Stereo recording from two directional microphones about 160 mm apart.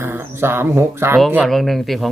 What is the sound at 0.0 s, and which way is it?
Speech, 15° right (ahead or behind).